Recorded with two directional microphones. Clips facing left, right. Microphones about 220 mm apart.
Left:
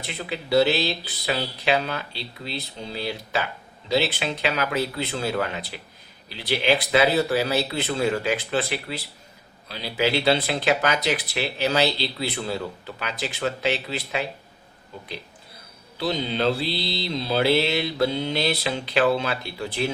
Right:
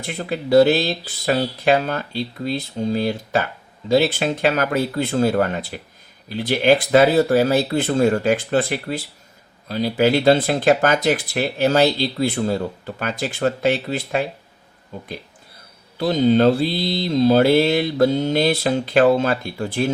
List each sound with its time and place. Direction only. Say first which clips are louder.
0.0 s speech: right 6 dB; 50° right (ahead or behind)
16.0 s speech: right 10 dB; 45° right (ahead or behind)